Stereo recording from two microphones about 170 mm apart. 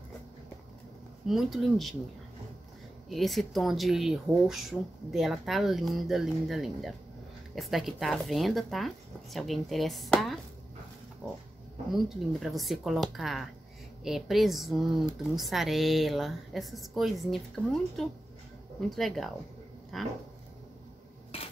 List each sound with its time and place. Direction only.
1.2 s speech: centre (ahead or behind)
3.1 s speech: centre (ahead or behind)
11.9 s speech: centre (ahead or behind)
21.3 s stir: 35° left (ahead or behind)